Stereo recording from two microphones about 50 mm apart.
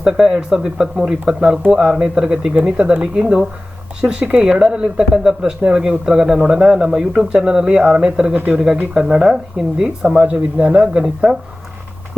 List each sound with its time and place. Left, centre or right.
0.0 s speech: centre